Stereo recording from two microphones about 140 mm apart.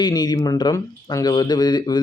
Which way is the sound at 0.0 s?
30° left (ahead or behind).